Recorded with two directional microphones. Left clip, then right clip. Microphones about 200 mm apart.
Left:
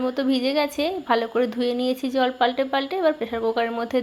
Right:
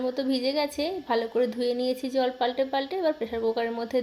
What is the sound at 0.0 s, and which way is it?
Speech, 10° left (ahead or behind).